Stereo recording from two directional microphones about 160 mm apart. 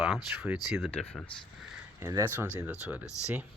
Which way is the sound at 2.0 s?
15° right (ahead or behind).